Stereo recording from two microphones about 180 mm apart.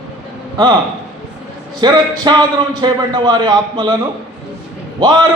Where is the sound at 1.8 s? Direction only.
25° right (ahead or behind).